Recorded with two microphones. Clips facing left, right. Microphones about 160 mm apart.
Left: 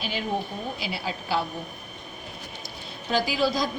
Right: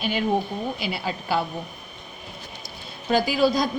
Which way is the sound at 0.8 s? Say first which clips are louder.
Right 3 dB; 55° right (ahead or behind).